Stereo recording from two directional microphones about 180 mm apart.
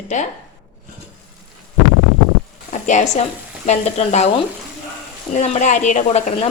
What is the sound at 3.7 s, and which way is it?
A woman's voice, 40° left (ahead or behind).